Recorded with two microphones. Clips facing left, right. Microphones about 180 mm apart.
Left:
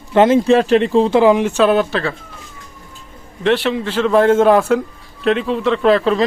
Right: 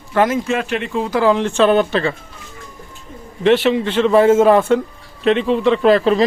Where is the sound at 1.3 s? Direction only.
10° left (ahead or behind).